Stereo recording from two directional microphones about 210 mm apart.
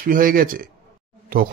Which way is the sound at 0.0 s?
40° right (ahead or behind).